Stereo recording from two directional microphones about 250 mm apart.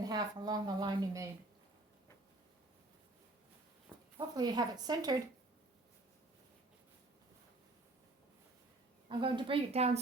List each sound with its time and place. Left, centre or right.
0.0 s a woman's voice: centre
3.9 s a sound: centre
4.4 s a woman's voice: centre
9.0 s a woman's voice: centre